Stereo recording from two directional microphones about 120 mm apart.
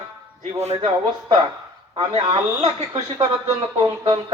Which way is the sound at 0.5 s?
70° right (ahead or behind).